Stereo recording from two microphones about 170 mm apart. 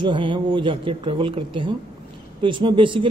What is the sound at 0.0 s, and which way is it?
Speech, 30° right (ahead or behind).